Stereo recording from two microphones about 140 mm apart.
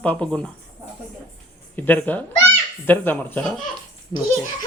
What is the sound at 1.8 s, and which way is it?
Speech, 15° left (ahead or behind).